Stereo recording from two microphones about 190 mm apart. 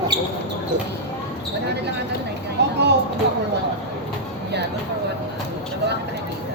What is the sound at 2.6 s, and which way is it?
Speech, 65° right (ahead or behind).